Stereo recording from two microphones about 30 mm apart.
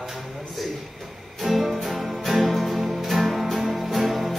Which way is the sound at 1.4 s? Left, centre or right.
Centre.